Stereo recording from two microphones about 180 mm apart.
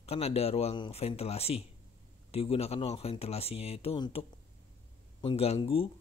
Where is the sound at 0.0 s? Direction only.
35° left (ahead or behind).